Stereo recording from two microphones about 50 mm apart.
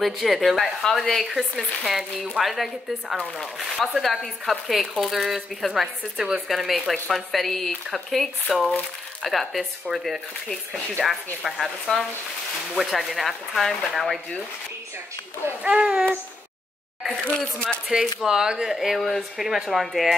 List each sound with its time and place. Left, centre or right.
0.0 s speech: centre
15.6 s a sound: right
17.2 s speech: centre
17.9 s speech: centre